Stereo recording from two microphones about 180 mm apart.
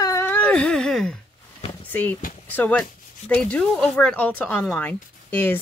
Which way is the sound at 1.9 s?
10° left (ahead or behind).